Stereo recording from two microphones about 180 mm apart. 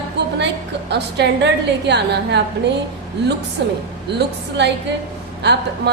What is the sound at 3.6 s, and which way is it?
A woman's voice, 75° right (ahead or behind).